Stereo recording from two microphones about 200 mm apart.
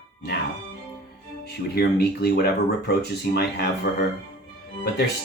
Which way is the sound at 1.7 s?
50° left (ahead or behind).